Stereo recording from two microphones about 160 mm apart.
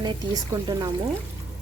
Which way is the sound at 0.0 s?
25° right (ahead or behind).